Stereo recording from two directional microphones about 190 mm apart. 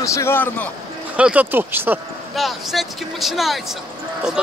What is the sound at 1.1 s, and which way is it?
Speech, 5° right (ahead or behind).